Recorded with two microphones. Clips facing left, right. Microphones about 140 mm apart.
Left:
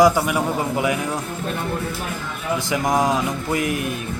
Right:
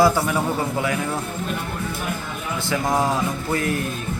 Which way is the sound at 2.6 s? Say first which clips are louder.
Left 1 dB; 15° left (ahead or behind).